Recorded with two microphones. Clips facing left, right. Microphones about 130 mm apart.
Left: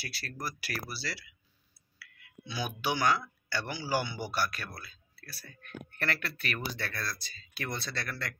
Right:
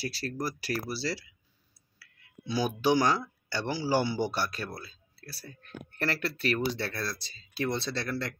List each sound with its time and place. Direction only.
0.0 s speech: 35° right (ahead or behind)